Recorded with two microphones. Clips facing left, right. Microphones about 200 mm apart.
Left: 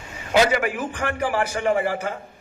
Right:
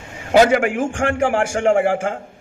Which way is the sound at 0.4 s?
50° right (ahead or behind).